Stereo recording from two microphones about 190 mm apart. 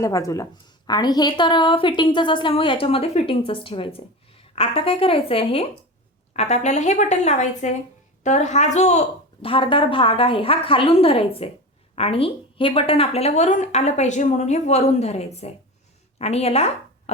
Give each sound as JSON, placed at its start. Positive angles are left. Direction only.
{"t": 0.0, "sound": "a woman's voice", "side_deg": 15}